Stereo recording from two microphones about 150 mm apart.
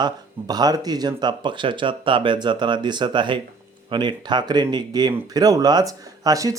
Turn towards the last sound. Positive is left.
turn(degrees=-20)  # may be behind; listen again after turning